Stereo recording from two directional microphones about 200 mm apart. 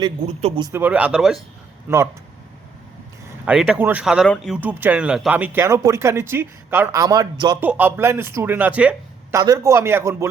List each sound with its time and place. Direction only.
0.0 s speech: 25° right (ahead or behind)
0.7 s speech: 10° right (ahead or behind)
3.2 s speech: 5° right (ahead or behind); by 7.6 s 20° right (ahead or behind)
7.6 s speech: 10° right (ahead or behind)
9.4 s speech: 15° right (ahead or behind)